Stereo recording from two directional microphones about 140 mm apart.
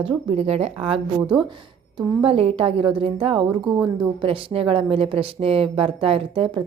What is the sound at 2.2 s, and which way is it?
Speech, 45° right (ahead or behind).